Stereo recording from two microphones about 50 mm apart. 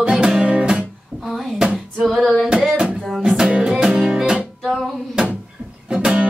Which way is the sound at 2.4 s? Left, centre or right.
Centre.